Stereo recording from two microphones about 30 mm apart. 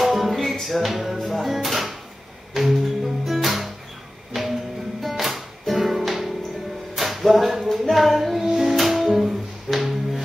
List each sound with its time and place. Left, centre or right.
0.0 s music: centre
7.0 s a sound: centre
7.9 s music: centre